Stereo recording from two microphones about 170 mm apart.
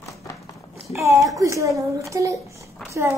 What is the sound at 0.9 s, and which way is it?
A child's voice, 20° right (ahead or behind).